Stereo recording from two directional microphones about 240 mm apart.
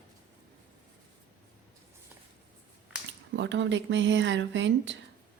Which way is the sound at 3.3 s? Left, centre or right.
Right.